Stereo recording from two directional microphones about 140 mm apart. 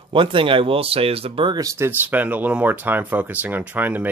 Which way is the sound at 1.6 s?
20° right (ahead or behind).